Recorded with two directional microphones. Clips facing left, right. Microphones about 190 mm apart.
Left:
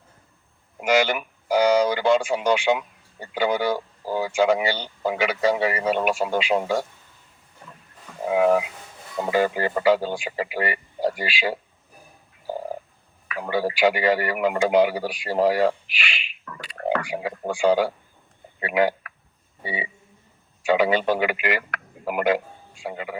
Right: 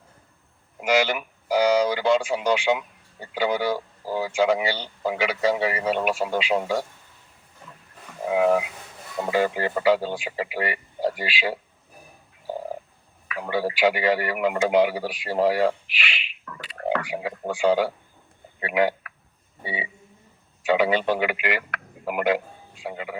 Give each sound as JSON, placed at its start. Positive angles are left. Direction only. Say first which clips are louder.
{"t": 0.9, "sound": "speech", "louder": "left 1 dB", "side_deg": 50}
{"t": 9.3, "sound": "speech", "louder": "left 1 dB", "side_deg": 45}
{"t": 13.2, "sound": "a man's voice", "louder": "left 1 dB", "side_deg": 45}
{"t": 20.7, "sound": "a man's voice", "louder": "left 1 dB", "side_deg": 40}